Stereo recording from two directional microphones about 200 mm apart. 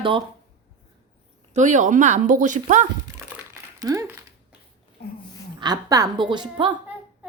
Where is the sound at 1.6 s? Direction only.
40° right (ahead or behind).